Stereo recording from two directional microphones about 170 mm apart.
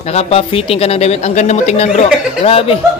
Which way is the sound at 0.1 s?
35° left (ahead or behind).